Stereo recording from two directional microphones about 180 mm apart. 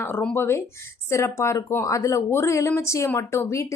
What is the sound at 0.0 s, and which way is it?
Speech, 10° left (ahead or behind).